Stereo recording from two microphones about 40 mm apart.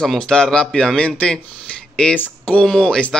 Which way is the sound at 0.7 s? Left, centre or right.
Centre.